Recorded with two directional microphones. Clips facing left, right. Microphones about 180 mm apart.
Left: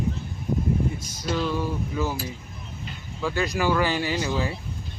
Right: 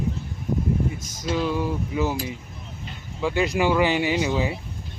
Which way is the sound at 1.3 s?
15° right (ahead or behind).